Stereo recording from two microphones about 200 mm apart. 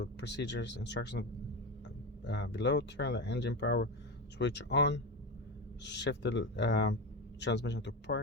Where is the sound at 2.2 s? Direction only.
60° left (ahead or behind).